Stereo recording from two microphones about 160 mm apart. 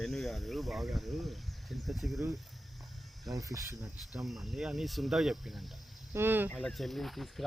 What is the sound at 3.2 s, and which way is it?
Speech, 20° right (ahead or behind).